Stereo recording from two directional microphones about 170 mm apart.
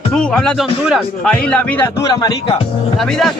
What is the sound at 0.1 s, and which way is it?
Speech, 5° left (ahead or behind).